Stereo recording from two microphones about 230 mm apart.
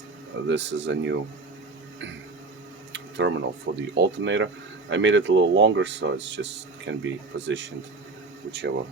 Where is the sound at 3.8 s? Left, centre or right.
Right.